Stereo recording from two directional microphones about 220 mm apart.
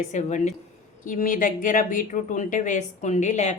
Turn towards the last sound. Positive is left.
turn(degrees=30)  # may be behind; listen again after turning